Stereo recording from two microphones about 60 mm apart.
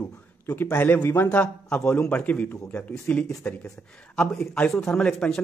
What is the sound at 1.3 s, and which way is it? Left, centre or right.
A man's voice, left.